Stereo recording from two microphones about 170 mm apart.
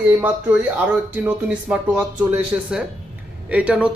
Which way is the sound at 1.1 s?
10° right (ahead or behind).